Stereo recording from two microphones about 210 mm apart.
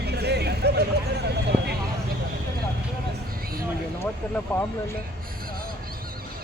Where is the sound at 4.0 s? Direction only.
10° left (ahead or behind).